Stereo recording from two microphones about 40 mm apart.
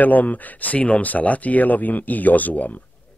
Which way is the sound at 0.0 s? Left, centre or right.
Left.